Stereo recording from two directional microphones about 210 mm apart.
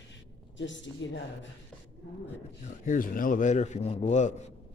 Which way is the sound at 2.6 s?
40° left (ahead or behind).